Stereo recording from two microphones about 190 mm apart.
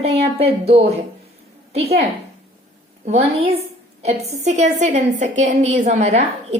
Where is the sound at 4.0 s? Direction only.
35° right (ahead or behind).